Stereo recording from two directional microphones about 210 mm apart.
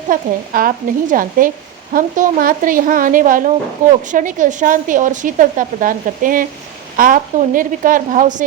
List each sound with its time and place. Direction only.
0.1 s a woman's voice: 40° right (ahead or behind)